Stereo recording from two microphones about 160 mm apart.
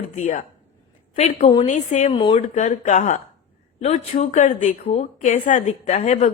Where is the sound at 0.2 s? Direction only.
50° left (ahead or behind).